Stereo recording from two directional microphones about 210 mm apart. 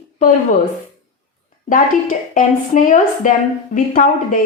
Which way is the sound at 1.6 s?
40° left (ahead or behind).